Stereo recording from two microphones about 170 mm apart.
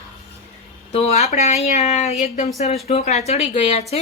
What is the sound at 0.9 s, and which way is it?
Speech, 40° left (ahead or behind).